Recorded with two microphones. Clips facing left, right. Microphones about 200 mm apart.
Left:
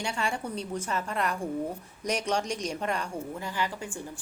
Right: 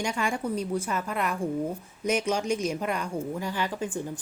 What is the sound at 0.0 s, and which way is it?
A woman's voice, 10° right (ahead or behind).